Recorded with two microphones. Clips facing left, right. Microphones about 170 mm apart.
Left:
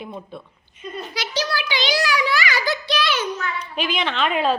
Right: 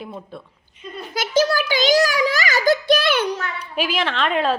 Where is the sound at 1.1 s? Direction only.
50° right (ahead or behind).